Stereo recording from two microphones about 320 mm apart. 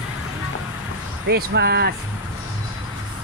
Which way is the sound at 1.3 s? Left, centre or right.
Right.